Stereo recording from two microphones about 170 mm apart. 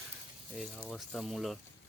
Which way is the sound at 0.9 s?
Centre (ahead or behind).